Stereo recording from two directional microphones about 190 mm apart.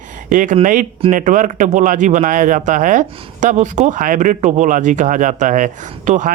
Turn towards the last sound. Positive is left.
turn(degrees=-40)  # may be behind; listen again after turning